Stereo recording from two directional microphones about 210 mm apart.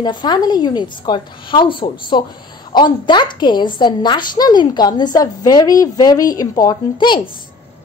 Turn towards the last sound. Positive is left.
turn(degrees=20)  # may be behind; listen again after turning